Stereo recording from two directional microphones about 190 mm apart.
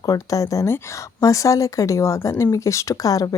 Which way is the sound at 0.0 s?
20° left (ahead or behind).